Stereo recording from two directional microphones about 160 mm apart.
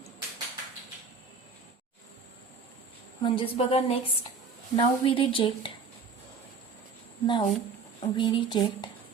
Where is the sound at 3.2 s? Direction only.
35° left (ahead or behind).